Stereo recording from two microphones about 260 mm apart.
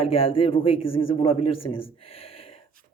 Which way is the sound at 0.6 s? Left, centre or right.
Left.